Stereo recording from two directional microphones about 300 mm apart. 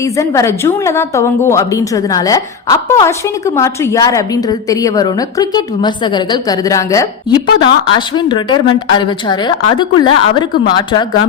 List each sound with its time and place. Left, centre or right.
0.0 s a woman's voice: centre